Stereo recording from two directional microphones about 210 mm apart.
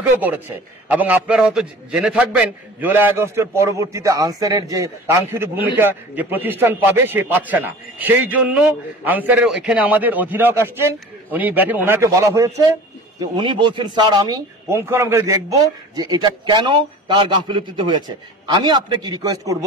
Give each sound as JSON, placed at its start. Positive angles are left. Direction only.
{"t": 0.0, "sound": "a man's voice", "side_deg": -10}